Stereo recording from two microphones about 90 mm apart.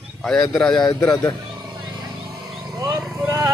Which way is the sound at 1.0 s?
45° left (ahead or behind).